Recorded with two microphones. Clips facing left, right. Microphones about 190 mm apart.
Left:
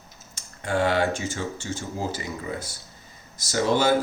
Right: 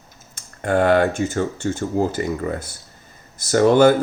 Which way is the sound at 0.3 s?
55° right (ahead or behind).